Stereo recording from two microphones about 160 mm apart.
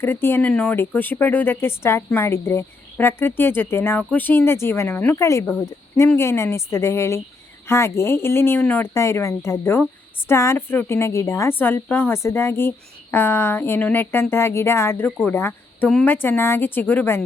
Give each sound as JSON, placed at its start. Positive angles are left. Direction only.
{"t": 0.0, "sound": "speech", "side_deg": 15}